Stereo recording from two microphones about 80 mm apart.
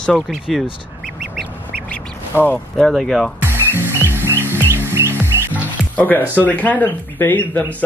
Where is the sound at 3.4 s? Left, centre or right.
Right.